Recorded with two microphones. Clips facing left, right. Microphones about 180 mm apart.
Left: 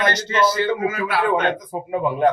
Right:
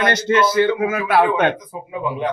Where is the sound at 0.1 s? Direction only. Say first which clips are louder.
Right 3 dB; 55° right (ahead or behind).